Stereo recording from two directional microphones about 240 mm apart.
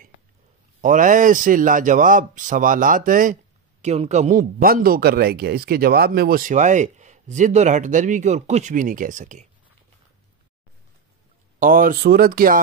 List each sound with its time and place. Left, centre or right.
0.7 s speech: right
11.6 s speech: right